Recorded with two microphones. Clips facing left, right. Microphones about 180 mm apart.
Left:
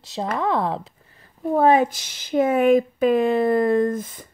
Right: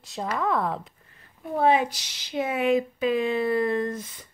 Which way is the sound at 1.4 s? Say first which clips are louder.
Left 5 dB; 45° left (ahead or behind).